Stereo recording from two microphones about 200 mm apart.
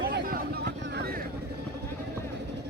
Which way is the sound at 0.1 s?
50° right (ahead or behind).